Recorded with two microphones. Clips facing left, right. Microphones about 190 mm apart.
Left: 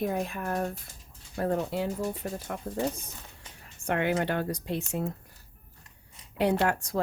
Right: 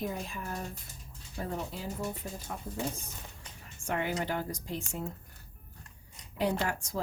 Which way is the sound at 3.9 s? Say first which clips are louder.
Left 5 dB; 65° left (ahead or behind).